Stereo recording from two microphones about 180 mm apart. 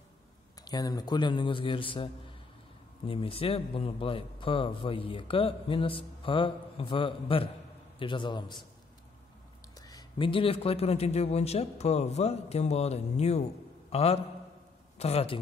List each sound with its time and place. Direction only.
0.7 s a man's voice: 20° left (ahead or behind)
9.8 s a man's voice: 20° left (ahead or behind)